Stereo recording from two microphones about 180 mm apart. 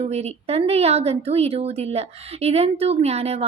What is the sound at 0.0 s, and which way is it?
A woman's voice, 35° right (ahead or behind).